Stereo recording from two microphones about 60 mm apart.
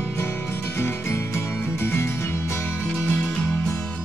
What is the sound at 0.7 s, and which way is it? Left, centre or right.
Music, left.